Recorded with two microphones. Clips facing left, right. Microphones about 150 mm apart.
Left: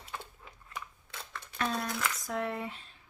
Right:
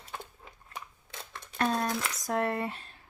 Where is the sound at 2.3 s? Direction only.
60° right (ahead or behind).